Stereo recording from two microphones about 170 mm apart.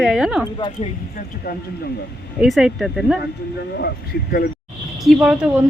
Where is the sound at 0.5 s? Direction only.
30° left (ahead or behind).